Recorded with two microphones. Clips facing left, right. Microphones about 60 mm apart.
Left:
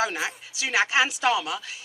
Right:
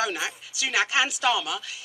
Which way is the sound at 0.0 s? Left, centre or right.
Left.